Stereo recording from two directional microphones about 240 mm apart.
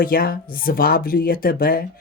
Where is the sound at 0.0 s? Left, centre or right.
Left.